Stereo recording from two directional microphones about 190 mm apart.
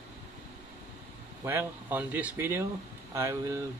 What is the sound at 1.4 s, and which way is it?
Speech, 10° right (ahead or behind).